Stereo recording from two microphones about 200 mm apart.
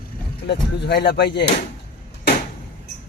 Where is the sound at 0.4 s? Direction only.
55° left (ahead or behind).